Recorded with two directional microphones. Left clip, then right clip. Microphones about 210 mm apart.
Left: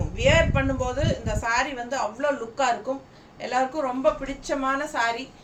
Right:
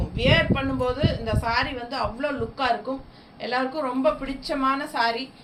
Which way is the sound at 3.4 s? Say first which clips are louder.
Left 1 dB; 15° left (ahead or behind).